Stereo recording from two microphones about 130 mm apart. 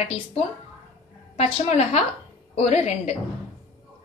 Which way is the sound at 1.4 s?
55° left (ahead or behind).